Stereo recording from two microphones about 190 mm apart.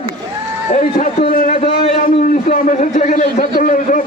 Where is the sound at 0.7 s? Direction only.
40° left (ahead or behind).